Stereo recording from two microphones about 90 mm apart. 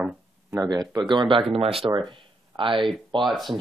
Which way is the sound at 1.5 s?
90° right.